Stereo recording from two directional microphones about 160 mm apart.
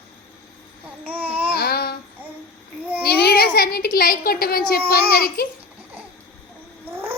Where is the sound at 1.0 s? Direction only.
10° right (ahead or behind).